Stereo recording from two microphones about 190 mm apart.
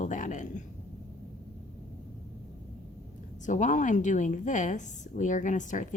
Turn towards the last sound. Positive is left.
turn(degrees=40)  # may be behind; listen again after turning